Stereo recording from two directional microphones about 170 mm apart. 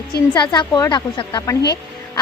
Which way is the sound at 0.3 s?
25° left (ahead or behind).